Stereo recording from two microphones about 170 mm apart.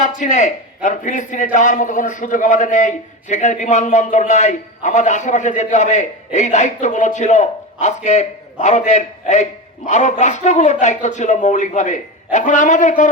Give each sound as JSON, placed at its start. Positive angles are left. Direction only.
{"t": 0.0, "sound": "a man's voice", "side_deg": 45}